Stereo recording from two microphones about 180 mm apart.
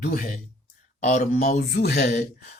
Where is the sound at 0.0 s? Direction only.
55° left (ahead or behind).